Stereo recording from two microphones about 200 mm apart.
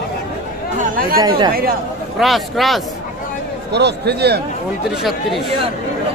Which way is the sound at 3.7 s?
55° right (ahead or behind).